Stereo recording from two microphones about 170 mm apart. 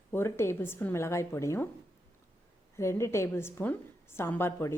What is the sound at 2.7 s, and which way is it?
A woman's voice, 15° left (ahead or behind).